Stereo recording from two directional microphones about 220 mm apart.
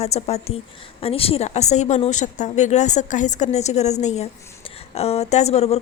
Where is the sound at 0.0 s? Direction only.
30° left (ahead or behind).